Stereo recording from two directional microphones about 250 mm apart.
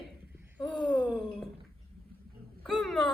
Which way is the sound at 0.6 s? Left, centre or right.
Centre.